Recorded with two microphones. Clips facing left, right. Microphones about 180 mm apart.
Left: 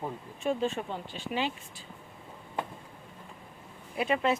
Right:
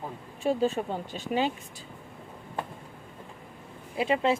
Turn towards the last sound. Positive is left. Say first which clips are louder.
# right 2 dB
turn(degrees=-25)  # may be behind; listen again after turning